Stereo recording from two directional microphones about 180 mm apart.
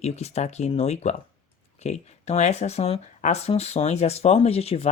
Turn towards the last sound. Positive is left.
turn(degrees=35)  # may be behind; listen again after turning